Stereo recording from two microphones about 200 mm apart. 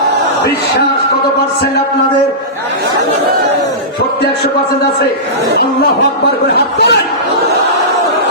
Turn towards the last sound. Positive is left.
turn(degrees=55)  # may be behind; listen again after turning